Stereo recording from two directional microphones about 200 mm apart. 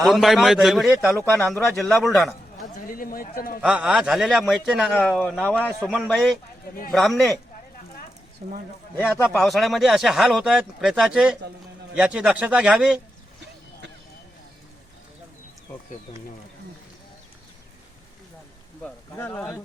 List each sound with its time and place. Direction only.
0.0 s speech: centre (ahead or behind)
1.1 s a man's voice: 10° left (ahead or behind)
2.8 s a man's voice: 45° left (ahead or behind)
3.6 s speech: 5° right (ahead or behind)
8.4 s speech: 45° right (ahead or behind)
9.4 s speech: centre (ahead or behind)
18.8 s a sound: 10° left (ahead or behind)